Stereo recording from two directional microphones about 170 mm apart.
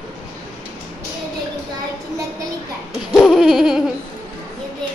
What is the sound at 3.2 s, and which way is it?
Baby laughter, centre (ahead or behind).